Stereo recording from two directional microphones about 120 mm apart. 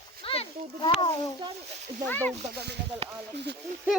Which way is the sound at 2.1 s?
15° left (ahead or behind).